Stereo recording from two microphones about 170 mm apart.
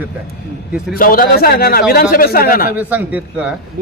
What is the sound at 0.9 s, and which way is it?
A man's voice, 60° left (ahead or behind).